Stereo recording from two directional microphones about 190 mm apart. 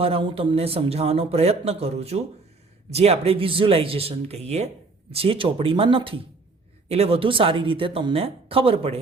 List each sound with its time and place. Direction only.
0.0 s a man's voice: 30° right (ahead or behind)